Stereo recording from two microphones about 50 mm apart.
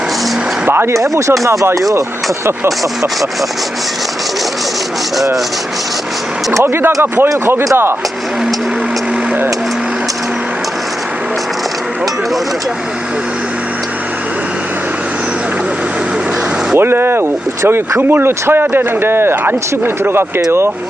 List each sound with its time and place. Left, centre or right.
0.7 s speech: right
1.1 s speech: right
6.8 s a man's voice: right
16.7 s a man's voice: right